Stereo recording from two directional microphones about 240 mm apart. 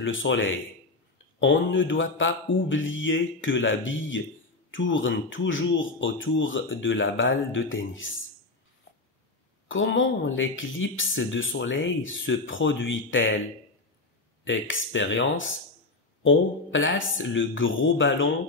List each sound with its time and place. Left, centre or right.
0.0 s speech: left
9.7 s speech: left
14.4 s speech: left